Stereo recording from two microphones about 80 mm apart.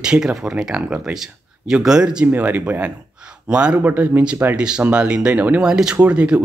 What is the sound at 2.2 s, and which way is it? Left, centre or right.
Speech, right.